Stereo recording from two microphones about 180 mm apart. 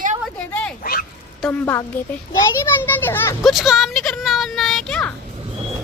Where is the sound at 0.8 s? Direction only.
55° left (ahead or behind).